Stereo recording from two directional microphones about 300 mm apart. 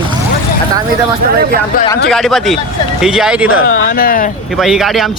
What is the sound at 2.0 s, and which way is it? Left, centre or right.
Speech, centre.